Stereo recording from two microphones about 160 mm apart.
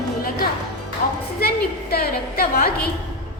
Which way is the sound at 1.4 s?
75° left (ahead or behind).